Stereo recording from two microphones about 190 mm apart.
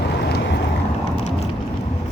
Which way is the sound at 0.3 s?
60° left (ahead or behind).